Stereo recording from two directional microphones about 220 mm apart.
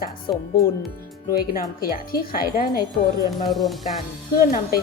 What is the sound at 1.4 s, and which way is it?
A woman's voice, 40° left (ahead or behind).